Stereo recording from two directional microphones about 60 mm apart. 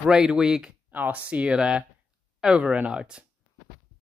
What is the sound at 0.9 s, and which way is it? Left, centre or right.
Speech, right.